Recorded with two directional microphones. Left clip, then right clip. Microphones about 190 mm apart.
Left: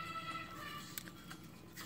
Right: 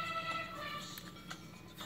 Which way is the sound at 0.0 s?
20° right (ahead or behind).